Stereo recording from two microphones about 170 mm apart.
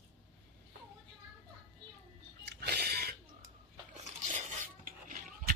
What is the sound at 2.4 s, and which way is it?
Music, 80° right.